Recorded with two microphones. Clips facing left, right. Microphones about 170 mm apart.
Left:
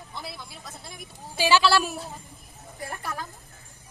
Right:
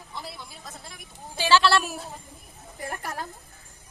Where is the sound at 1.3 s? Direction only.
15° left (ahead or behind).